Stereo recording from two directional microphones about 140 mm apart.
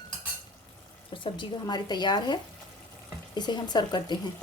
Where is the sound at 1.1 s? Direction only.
35° left (ahead or behind).